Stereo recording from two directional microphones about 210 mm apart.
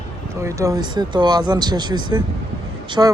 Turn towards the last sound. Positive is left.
turn(degrees=-15)  # may be behind; listen again after turning